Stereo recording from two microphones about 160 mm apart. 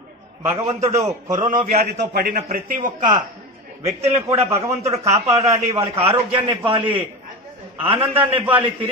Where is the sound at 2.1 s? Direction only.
65° right (ahead or behind).